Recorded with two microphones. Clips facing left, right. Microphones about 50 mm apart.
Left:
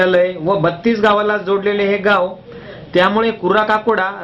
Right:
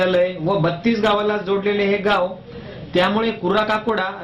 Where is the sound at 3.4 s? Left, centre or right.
Left.